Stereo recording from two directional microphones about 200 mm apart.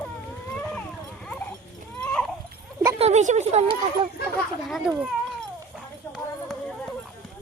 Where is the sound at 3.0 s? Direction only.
35° right (ahead or behind).